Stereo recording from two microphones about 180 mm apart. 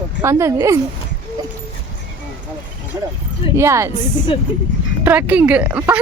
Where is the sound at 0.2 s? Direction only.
15° right (ahead or behind).